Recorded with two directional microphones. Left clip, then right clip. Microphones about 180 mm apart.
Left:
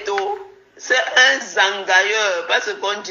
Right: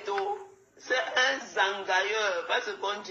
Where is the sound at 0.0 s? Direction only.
35° left (ahead or behind).